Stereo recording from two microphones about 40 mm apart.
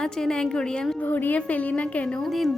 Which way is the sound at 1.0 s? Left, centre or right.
Left.